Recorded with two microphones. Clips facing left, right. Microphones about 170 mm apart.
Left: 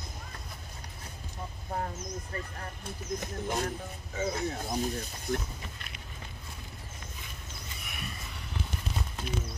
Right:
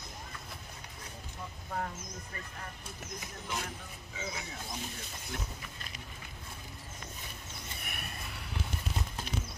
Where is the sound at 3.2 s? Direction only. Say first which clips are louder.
Left 7 dB; 45° left (ahead or behind).